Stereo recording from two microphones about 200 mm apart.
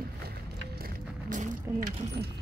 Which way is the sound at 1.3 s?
45° right (ahead or behind).